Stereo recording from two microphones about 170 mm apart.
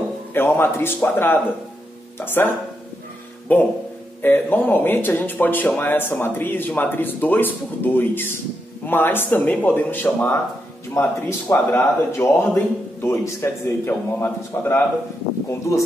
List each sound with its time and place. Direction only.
0.3 s speech: 15° left (ahead or behind)